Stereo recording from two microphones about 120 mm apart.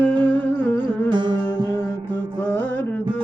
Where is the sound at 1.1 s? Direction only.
40° right (ahead or behind).